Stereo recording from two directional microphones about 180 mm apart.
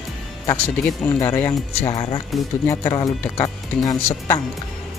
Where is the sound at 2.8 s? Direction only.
20° left (ahead or behind).